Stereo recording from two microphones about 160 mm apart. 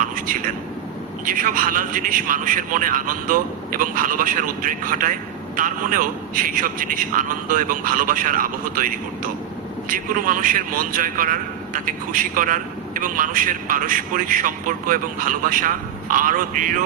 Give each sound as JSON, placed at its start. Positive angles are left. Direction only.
{"t": 0.0, "sound": "a man's voice", "side_deg": -60}